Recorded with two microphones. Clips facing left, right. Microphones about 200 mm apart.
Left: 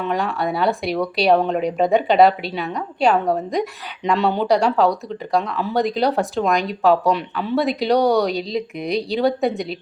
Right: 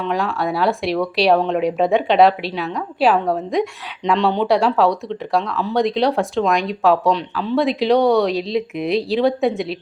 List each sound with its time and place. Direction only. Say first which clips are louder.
0.0 s speech: right 1 dB; centre (ahead or behind)